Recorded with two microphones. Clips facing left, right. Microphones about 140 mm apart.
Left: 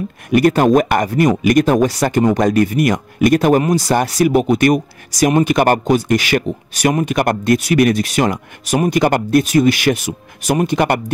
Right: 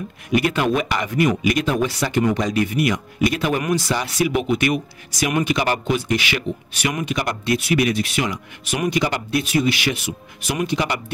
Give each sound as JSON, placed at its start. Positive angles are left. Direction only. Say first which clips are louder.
{"t": 0.3, "sound": "speech", "louder": "left 8 dB", "side_deg": 45}